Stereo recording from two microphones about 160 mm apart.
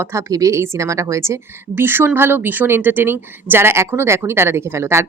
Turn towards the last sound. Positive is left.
turn(degrees=-15)  # may be behind; listen again after turning